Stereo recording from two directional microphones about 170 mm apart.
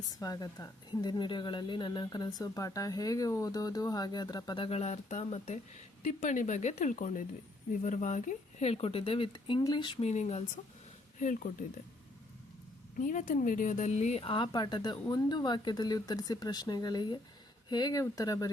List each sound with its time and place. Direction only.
0.1 s a woman's voice: 20° left (ahead or behind)
10.0 s speech: 40° left (ahead or behind)
13.0 s a woman's voice: 45° left (ahead or behind); by 18.5 s 20° left (ahead or behind)